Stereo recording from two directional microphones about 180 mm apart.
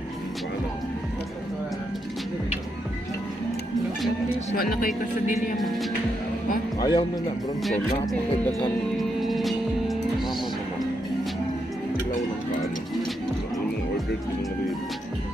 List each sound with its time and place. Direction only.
4.6 s speech: 55° left (ahead or behind)
5.6 s speech: centre (ahead or behind)
6.8 s speech: 25° left (ahead or behind)
8.5 s music: centre (ahead or behind)